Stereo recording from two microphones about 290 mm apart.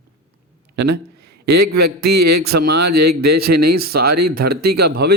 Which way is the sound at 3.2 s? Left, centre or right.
Right.